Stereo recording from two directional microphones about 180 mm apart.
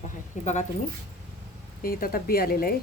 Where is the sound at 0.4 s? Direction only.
40° left (ahead or behind).